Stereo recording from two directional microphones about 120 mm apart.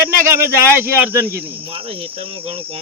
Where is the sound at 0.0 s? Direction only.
20° right (ahead or behind).